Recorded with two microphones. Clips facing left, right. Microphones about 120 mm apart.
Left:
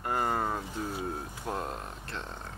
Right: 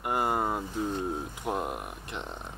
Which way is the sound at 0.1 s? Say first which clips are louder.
Right 2 dB; 15° right (ahead or behind).